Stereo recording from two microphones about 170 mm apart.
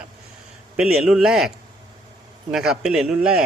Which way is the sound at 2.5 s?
5° right (ahead or behind).